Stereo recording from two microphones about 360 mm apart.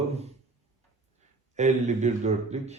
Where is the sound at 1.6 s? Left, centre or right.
Centre.